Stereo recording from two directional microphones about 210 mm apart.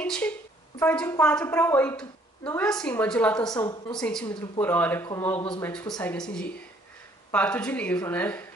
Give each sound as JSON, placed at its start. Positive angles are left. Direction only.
{"t": 0.0, "sound": "a woman's voice", "side_deg": 5}
{"t": 3.5, "sound": "a woman's voice", "side_deg": 20}
{"t": 3.9, "sound": "a woman's voice", "side_deg": 5}
{"t": 7.2, "sound": "a woman's voice", "side_deg": 10}